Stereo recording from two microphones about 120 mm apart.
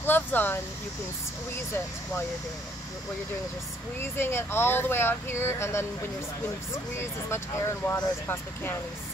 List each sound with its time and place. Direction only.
0.0 s speech: 15° left (ahead or behind)
4.0 s speech: 20° left (ahead or behind)